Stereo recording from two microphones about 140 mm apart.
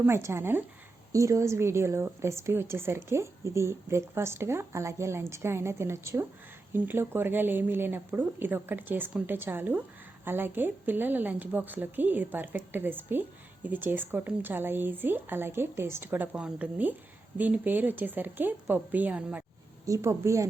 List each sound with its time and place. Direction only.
0.0 s a woman's voice: 20° right (ahead or behind)
19.8 s a woman's voice: 20° right (ahead or behind)